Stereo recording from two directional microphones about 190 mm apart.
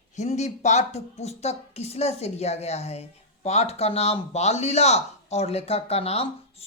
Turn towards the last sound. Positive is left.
turn(degrees=35)  # may be behind; listen again after turning